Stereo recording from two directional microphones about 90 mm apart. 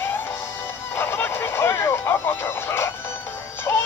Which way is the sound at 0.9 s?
25° left (ahead or behind).